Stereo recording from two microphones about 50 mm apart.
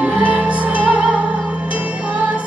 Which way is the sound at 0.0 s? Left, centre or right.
Right.